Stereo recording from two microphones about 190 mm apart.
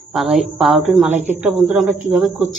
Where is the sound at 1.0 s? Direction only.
35° right (ahead or behind).